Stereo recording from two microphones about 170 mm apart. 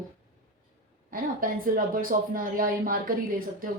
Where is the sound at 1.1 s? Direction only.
55° right (ahead or behind).